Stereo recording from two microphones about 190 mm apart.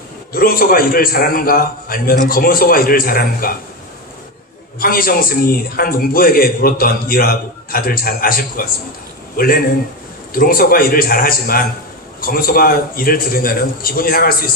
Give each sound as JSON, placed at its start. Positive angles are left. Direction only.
{"t": 0.3, "sound": "a man's voice", "side_deg": 50}
{"t": 4.8, "sound": "a man's voice", "side_deg": 50}